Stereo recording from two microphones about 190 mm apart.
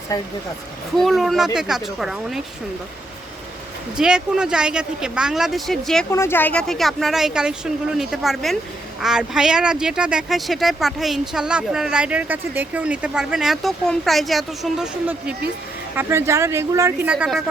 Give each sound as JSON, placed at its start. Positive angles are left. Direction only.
{"t": 0.1, "sound": "speech", "side_deg": 20}
{"t": 0.9, "sound": "speech", "side_deg": 0}
{"t": 3.9, "sound": "speech", "side_deg": -5}